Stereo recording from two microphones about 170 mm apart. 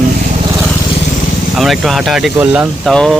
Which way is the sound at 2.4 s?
15° right (ahead or behind).